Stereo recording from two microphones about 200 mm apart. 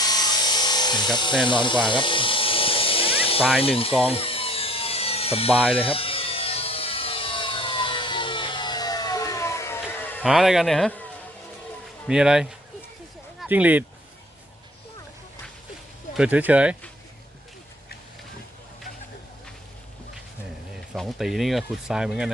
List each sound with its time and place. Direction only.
0.0 s a sound: 20° left (ahead or behind)
1.5 s snake: 25° left (ahead or behind)
3.6 s speech: 30° left (ahead or behind)
4.0 s wood: 30° left (ahead or behind); by 10.2 s 10° left (ahead or behind)
10.2 s speech: centre (ahead or behind)
12.0 s speech: 5° right (ahead or behind)
16.1 s speech: 5° right (ahead or behind)
20.9 s speech: centre (ahead or behind)